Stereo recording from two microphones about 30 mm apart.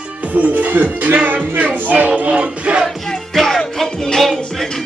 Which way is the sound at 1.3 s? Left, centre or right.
Right.